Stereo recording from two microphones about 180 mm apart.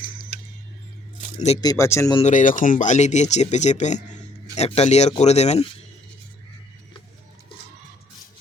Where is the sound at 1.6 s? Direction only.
20° left (ahead or behind).